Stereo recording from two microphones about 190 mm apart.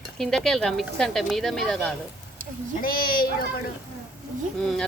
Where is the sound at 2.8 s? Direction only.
50° left (ahead or behind).